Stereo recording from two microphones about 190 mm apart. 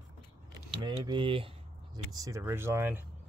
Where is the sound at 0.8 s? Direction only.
25° right (ahead or behind).